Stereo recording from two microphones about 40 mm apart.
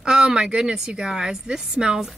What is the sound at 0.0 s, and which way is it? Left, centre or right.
Speech, right.